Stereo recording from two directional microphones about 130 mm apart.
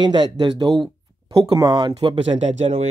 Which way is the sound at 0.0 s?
35° right (ahead or behind).